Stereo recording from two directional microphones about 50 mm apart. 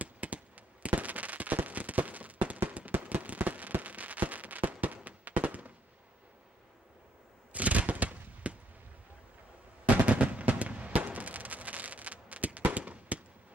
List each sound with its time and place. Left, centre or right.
0.0 s fireworks: right
7.5 s machine gun: right
10.0 s fireworks: right